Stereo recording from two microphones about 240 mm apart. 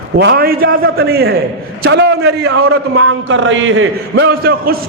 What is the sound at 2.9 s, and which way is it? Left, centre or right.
A man's voice, right.